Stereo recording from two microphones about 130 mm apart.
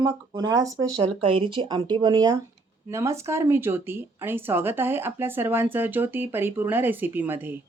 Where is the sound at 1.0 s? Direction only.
45° right (ahead or behind); by 7.6 s 15° right (ahead or behind).